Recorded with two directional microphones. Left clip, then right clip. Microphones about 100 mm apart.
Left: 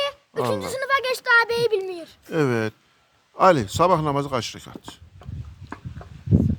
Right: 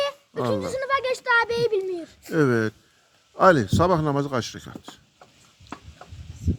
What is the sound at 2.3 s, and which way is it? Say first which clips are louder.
Speech: right 1 dB; 15° left (ahead or behind).